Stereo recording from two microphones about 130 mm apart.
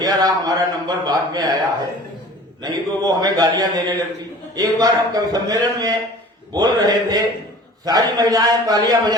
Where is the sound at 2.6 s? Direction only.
30° right (ahead or behind).